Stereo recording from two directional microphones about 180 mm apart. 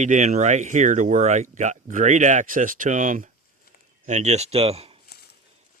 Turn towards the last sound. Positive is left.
turn(degrees=-35)  # may be behind; listen again after turning